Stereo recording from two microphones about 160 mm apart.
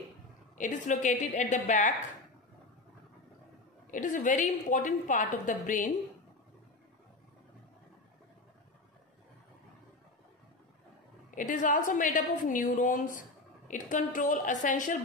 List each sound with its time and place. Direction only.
0.6 s a woman's voice: 50° left (ahead or behind)
3.9 s a woman's voice: 55° left (ahead or behind)
11.2 s a woman's voice: 55° left (ahead or behind)